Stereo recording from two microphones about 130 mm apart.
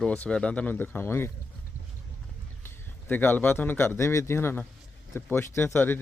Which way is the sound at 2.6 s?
15° left (ahead or behind).